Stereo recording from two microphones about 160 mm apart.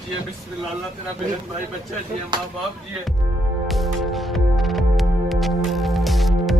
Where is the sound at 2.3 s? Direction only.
30° right (ahead or behind).